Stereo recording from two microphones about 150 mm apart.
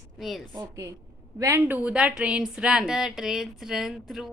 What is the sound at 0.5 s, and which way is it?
A woman's voice, 25° right (ahead or behind).